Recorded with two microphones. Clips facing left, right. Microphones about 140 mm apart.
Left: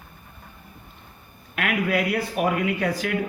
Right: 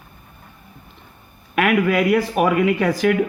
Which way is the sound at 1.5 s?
85° right.